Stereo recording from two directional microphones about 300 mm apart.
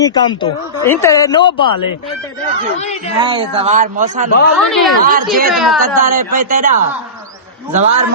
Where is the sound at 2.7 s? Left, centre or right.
Left.